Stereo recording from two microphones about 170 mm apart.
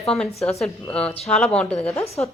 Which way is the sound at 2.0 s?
35° left (ahead or behind).